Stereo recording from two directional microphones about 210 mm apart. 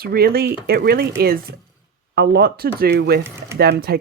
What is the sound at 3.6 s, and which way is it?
Speech, 50° right (ahead or behind).